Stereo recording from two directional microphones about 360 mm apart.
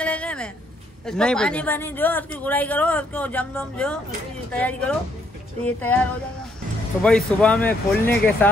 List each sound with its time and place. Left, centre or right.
0.0 s a sound: centre
1.0 s speech: centre
7.0 s speech: centre